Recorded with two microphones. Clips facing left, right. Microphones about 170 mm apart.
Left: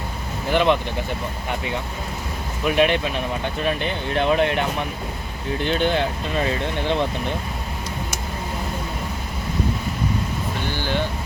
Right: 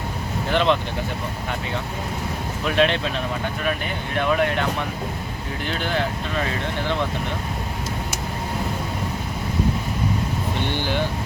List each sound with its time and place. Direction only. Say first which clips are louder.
0.5 s speech: left 1 dB; 10° left (ahead or behind)
2.6 s speech: left 2 dB; 15° left (ahead or behind)
3.6 s speech: left 2 dB; 30° left (ahead or behind)
5.6 s speech: left 4 dB; 20° left (ahead or behind)